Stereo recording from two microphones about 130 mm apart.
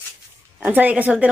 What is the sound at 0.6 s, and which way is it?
Speech, 15° right (ahead or behind).